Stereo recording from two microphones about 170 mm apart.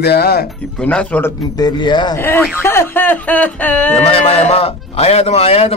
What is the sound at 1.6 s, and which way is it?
Speech, 25° left (ahead or behind).